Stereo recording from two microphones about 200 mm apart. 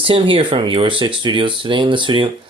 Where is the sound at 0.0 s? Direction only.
25° right (ahead or behind).